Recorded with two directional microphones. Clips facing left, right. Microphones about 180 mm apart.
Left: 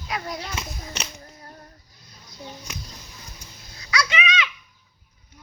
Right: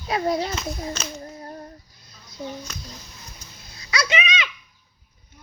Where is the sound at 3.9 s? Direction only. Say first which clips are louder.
Right 1 dB; 25° right (ahead or behind).